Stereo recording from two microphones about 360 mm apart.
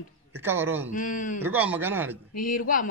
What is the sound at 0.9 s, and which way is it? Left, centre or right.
Speech, left.